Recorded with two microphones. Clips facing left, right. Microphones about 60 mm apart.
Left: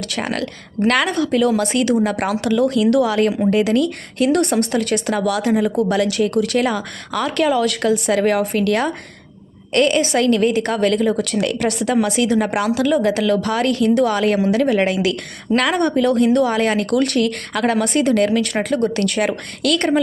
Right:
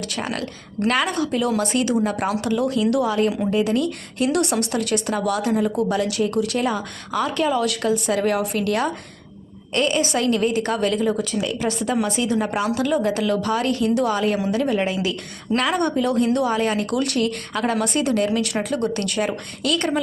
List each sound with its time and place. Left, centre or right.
0.1 s speech: left
11.2 s speech: left
15.5 s speech: left